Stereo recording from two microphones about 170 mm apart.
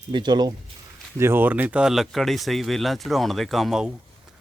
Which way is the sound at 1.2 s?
10° right (ahead or behind).